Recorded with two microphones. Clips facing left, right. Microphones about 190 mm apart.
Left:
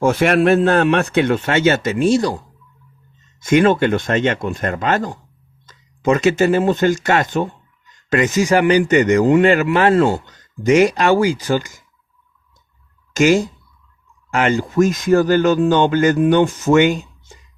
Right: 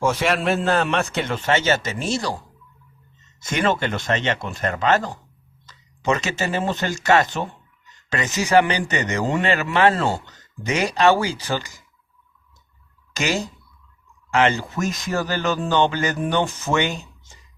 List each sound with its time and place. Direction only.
0.0 s a man's voice: 55° left (ahead or behind)
3.4 s a man's voice: 50° left (ahead or behind)
13.1 s a man's voice: 50° left (ahead or behind)